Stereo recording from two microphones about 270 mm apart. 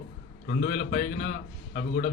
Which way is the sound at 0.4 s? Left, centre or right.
Left.